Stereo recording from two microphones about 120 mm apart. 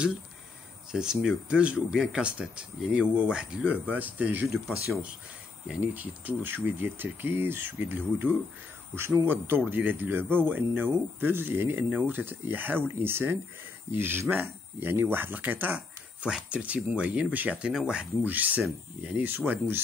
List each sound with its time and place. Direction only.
0.9 s speech: 5° right (ahead or behind)
5.7 s speech: 15° right (ahead or behind)